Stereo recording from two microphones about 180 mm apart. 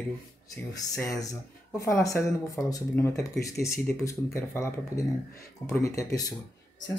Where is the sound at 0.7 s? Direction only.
15° left (ahead or behind).